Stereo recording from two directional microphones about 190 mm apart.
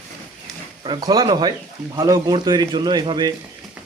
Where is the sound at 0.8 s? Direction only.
25° right (ahead or behind).